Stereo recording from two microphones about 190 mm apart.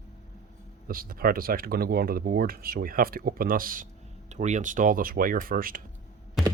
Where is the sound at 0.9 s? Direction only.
50° right (ahead or behind).